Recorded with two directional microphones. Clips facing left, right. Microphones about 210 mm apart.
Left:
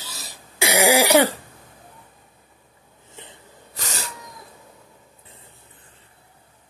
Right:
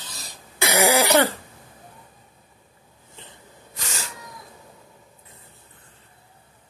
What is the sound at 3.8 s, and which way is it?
Cat, 40° left (ahead or behind).